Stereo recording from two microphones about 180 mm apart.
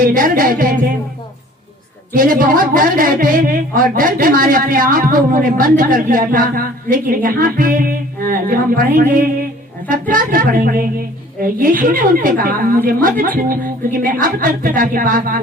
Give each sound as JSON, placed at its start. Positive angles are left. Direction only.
{"t": 0.0, "sound": "a woman's voice", "side_deg": -50}
{"t": 2.1, "sound": "a woman's voice", "side_deg": -50}